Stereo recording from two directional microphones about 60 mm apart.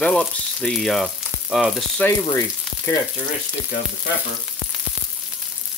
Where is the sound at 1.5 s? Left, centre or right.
Centre.